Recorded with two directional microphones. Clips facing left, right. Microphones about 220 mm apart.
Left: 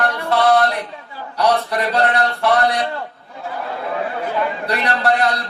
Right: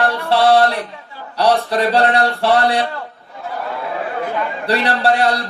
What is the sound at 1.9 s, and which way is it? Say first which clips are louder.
Speech: right 2 dB; 30° right (ahead or behind).